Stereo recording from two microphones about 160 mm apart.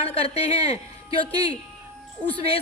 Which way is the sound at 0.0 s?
40° left (ahead or behind).